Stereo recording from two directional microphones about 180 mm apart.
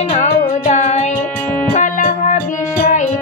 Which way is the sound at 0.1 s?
40° left (ahead or behind).